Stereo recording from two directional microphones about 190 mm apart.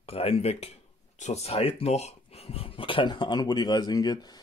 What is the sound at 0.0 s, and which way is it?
Speech, 30° left (ahead or behind).